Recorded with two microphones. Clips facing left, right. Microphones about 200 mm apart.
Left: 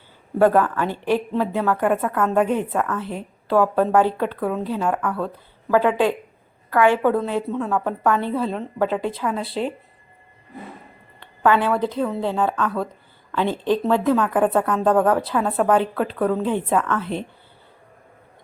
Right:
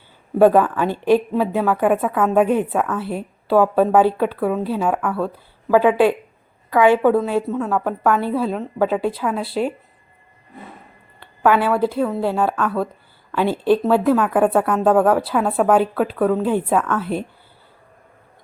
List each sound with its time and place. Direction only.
0.3 s a woman's voice: 15° right (ahead or behind)
11.2 s a sound: 10° right (ahead or behind)
11.9 s speech: 5° right (ahead or behind)